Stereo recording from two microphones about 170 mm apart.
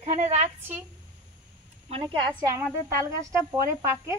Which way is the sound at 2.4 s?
15° right (ahead or behind).